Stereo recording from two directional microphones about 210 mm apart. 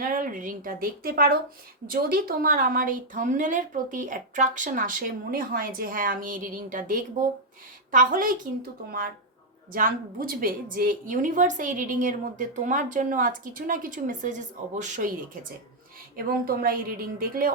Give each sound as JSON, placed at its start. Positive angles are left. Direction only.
{"t": 0.0, "sound": "a woman's voice", "side_deg": -40}
{"t": 9.7, "sound": "a woman's voice", "side_deg": -40}